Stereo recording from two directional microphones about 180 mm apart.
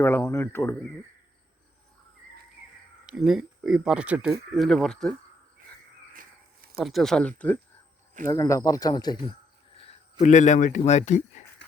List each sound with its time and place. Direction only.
0.0 s speech: 15° left (ahead or behind)
3.1 s speech: centre (ahead or behind)
6.7 s speech: centre (ahead or behind); by 9.2 s 25° left (ahead or behind)
10.2 s speech: 40° left (ahead or behind)